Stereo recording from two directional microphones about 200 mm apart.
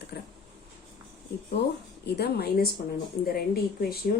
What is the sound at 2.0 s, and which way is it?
Speech, 55° left (ahead or behind).